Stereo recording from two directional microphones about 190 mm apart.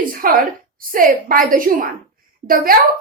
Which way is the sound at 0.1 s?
50° right (ahead or behind).